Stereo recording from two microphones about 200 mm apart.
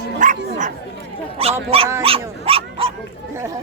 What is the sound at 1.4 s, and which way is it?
Speech, 30° right (ahead or behind).